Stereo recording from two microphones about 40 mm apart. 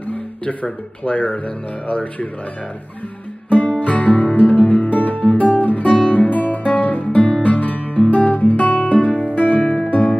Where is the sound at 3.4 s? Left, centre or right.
Left.